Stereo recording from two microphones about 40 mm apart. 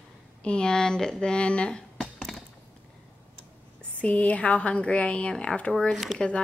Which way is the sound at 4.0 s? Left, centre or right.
Left.